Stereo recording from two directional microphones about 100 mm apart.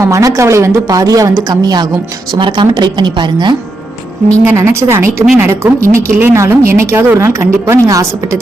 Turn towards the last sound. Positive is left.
turn(degrees=-30)  # may be behind; listen again after turning